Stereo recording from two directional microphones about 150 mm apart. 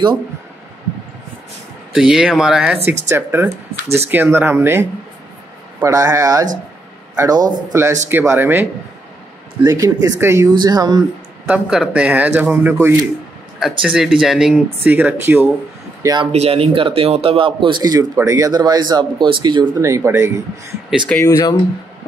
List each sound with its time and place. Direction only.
2.0 s a man's voice: 5° right (ahead or behind); by 11.1 s 25° right (ahead or behind)
11.4 s a man's voice: 5° right (ahead or behind)
13.6 s a man's voice: centre (ahead or behind)
16.0 s speech: 25° right (ahead or behind)
16.3 s speech: 40° right (ahead or behind)
19.8 s speech: 20° right (ahead or behind)
21.2 s speech: 20° left (ahead or behind)